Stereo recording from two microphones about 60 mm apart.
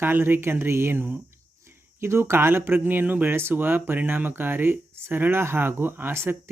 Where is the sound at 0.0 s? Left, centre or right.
Right.